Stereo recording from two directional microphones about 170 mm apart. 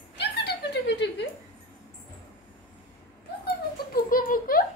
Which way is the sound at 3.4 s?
60° left (ahead or behind).